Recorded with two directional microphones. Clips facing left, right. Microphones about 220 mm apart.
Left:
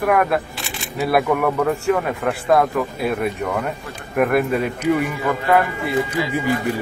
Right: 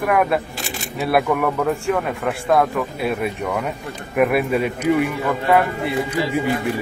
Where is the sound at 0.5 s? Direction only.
45° right (ahead or behind).